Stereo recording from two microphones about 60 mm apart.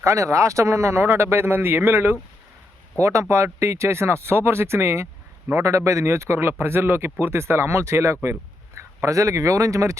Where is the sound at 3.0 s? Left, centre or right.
Right.